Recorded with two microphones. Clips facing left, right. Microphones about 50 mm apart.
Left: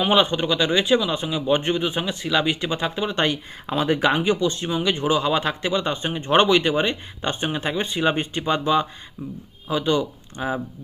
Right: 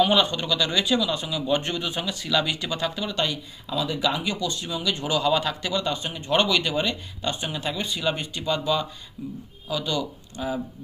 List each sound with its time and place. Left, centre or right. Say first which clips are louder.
0.0 s a man's voice: left 2 dB; left
4.2 s speech: left 7 dB; left
4.9 s a man's voice: right 1 dB; left